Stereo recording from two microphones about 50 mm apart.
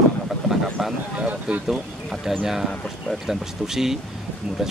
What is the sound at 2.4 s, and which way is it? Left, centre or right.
Speech, centre.